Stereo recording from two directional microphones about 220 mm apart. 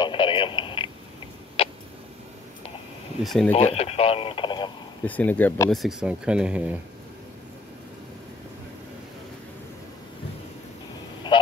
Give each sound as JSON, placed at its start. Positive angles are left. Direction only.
{"t": 0.0, "sound": "a sound", "side_deg": 20}
{"t": 1.6, "sound": "tick-tock", "side_deg": 25}
{"t": 3.3, "sound": "speech", "side_deg": 0}
{"t": 3.5, "sound": "radio", "side_deg": 30}
{"t": 5.0, "sound": "speech", "side_deg": 5}
{"t": 11.3, "sound": "duck", "side_deg": 20}